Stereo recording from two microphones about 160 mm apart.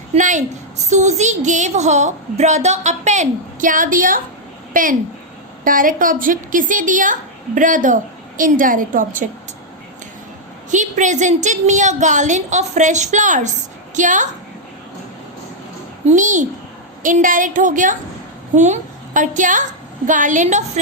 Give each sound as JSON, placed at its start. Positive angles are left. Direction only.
{"t": 0.1, "sound": "a woman's voice", "side_deg": -50}
{"t": 10.7, "sound": "a woman's voice", "side_deg": -50}
{"t": 16.0, "sound": "a woman's voice", "side_deg": -50}